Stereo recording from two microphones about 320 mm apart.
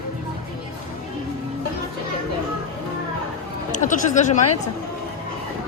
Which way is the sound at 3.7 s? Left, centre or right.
Left.